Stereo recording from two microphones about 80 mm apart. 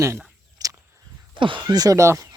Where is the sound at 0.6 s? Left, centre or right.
Right.